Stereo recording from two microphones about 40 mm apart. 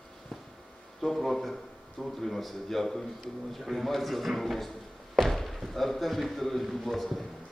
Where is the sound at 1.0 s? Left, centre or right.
Centre.